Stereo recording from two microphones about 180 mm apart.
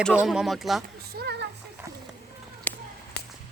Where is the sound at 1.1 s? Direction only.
60° right (ahead or behind).